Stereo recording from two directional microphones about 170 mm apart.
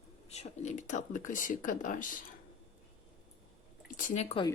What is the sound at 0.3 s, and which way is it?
Speech, 40° left (ahead or behind).